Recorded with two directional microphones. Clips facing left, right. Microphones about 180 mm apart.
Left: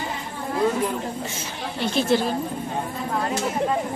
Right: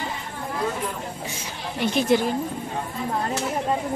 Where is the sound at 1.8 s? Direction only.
15° right (ahead or behind).